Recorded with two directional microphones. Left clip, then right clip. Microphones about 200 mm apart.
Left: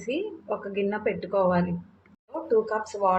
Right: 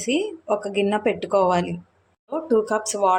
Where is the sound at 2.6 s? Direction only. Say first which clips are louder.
Right 5 dB; 65° right (ahead or behind).